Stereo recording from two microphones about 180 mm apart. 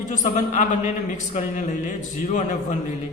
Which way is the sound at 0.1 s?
40° left (ahead or behind).